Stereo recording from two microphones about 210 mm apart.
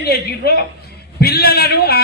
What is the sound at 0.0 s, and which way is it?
A man's voice, 50° left (ahead or behind).